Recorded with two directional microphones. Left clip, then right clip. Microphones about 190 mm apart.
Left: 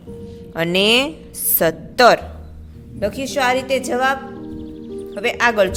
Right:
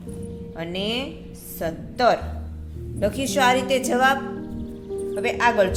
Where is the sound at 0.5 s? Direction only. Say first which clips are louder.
Left 12 dB; 55° left (ahead or behind).